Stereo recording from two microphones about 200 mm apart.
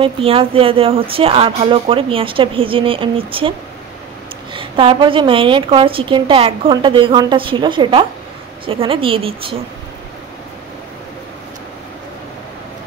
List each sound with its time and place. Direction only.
0.0 s a woman's voice: 30° right (ahead or behind)
4.6 s a woman's voice: 25° right (ahead or behind)